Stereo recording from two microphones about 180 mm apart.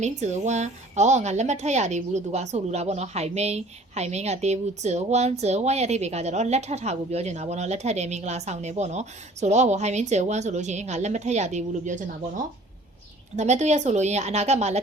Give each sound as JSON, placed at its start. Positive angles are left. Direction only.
{"t": 0.0, "sound": "speech", "side_deg": -40}